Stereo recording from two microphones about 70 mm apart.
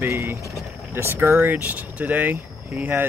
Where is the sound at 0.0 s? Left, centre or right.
Right.